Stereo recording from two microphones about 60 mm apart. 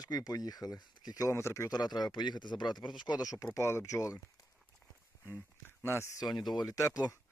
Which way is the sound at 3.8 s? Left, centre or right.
Left.